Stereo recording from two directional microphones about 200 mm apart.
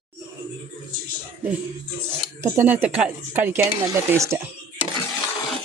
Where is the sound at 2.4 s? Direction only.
10° right (ahead or behind).